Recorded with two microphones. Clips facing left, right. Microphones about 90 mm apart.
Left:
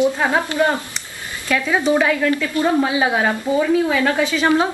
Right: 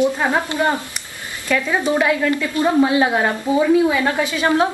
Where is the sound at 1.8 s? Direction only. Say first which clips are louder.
Left 1 dB; 5° right (ahead or behind).